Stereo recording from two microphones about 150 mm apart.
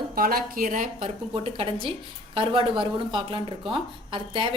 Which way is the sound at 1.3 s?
40° right (ahead or behind).